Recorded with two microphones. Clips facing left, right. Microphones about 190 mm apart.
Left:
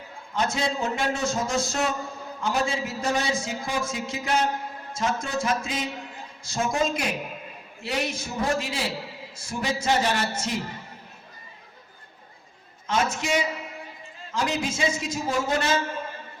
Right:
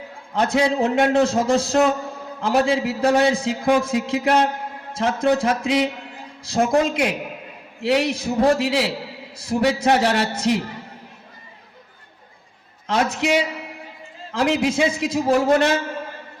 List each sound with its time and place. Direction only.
0.3 s a man's voice: 65° right (ahead or behind)
12.9 s a man's voice: 65° right (ahead or behind)